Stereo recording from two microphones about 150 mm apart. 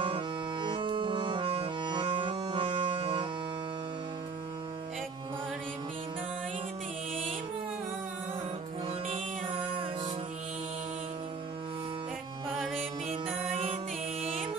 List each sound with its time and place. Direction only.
0.0 s accordion: 35° right (ahead or behind)
12.5 s mantra: centre (ahead or behind)
13.1 s music: 40° right (ahead or behind)